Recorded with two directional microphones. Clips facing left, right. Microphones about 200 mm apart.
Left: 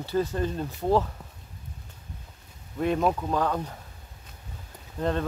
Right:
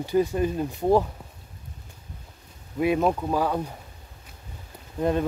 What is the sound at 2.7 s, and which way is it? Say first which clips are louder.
Speech: right 2 dB; 10° right (ahead or behind).